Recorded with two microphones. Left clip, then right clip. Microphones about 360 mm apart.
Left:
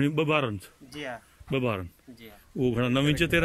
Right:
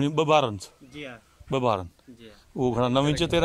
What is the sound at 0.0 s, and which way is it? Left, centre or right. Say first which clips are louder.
Speech: right 4 dB; centre.